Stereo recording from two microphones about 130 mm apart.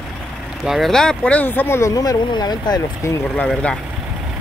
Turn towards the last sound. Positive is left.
turn(degrees=5)  # may be behind; listen again after turning